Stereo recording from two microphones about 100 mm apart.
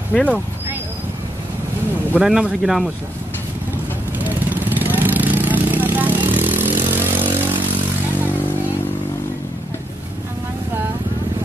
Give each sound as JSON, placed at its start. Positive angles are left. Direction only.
{"t": 0.1, "sound": "speech", "side_deg": 15}
{"t": 2.1, "sound": "speech", "side_deg": -5}
{"t": 4.2, "sound": "vehicle", "side_deg": -20}